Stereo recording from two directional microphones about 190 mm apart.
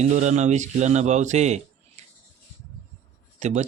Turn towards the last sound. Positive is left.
turn(degrees=-35)  # may be behind; listen again after turning